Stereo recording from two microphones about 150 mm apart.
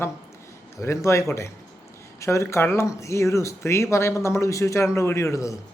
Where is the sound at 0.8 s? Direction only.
20° left (ahead or behind).